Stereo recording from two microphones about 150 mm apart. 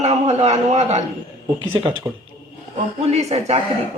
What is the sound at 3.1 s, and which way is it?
Speech, 45° right (ahead or behind).